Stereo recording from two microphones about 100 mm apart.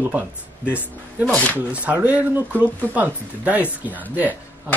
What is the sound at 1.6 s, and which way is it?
Speech, 15° right (ahead or behind).